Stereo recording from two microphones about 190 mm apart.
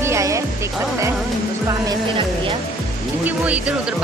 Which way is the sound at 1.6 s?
20° right (ahead or behind).